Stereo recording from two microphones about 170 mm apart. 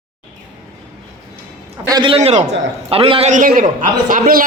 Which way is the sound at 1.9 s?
30° right (ahead or behind).